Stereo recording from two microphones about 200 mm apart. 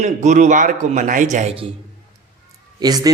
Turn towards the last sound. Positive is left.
turn(degrees=-20)  # may be behind; listen again after turning